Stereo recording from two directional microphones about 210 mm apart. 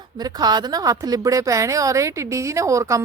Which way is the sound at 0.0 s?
20° right (ahead or behind).